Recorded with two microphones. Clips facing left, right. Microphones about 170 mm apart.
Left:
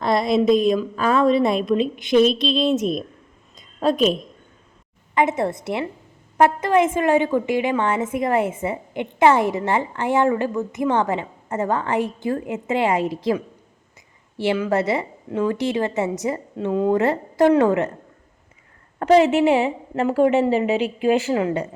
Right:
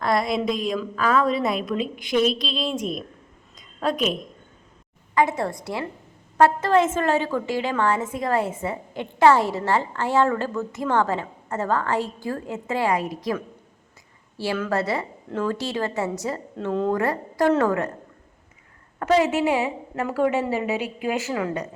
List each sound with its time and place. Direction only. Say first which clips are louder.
0.0 s a woman's voice: left 4 dB; 25° left (ahead or behind)
14.3 s a woman's voice: left 4 dB; 20° left (ahead or behind)
16.9 s a woman's voice: left 4 dB; 25° left (ahead or behind)
19.1 s a woman's voice: left 5 dB; 25° left (ahead or behind)